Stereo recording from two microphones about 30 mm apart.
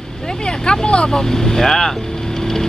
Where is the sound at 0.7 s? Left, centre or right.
Left.